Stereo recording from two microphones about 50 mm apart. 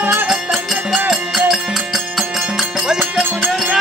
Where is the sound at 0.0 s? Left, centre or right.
Right.